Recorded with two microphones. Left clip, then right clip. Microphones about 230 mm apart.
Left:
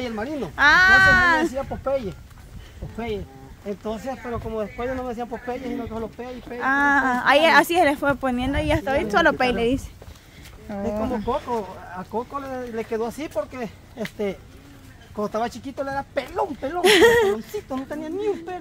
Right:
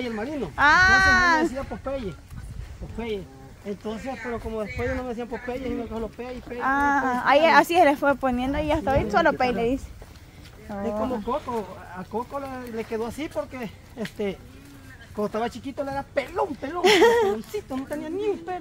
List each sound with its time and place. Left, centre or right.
0.0 s speech: centre
1.7 s speech: centre
3.6 s speech: centre
11.5 s speech: centre
17.8 s speech: centre